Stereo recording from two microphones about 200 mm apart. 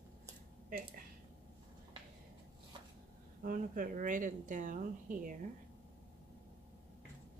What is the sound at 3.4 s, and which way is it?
Speech, 40° right (ahead or behind).